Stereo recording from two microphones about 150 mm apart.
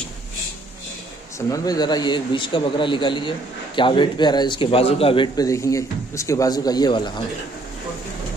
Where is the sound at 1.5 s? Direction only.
25° left (ahead or behind).